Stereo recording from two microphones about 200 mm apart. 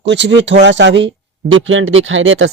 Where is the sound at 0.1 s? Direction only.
65° right (ahead or behind).